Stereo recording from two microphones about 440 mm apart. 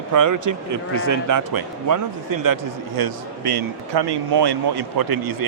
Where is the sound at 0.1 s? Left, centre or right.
Right.